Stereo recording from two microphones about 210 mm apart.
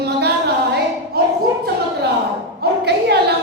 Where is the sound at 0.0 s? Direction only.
50° right (ahead or behind).